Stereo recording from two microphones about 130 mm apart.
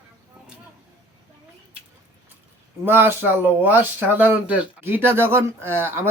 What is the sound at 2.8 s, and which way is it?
Speech, 15° right (ahead or behind).